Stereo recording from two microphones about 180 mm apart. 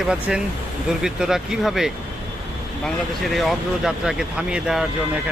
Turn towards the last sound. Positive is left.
turn(degrees=-5)  # may be behind; listen again after turning